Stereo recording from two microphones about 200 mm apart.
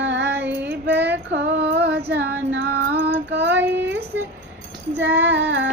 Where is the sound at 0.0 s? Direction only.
65° right (ahead or behind).